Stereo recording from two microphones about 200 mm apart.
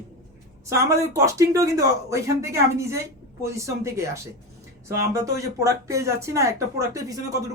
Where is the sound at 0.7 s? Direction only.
15° right (ahead or behind).